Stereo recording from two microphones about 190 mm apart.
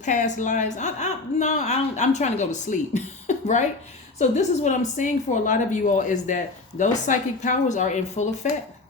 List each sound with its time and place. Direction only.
0.0 s a woman's voice: 40° left (ahead or behind)